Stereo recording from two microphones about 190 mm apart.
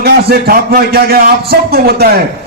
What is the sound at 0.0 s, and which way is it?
A man's voice, 55° right (ahead or behind).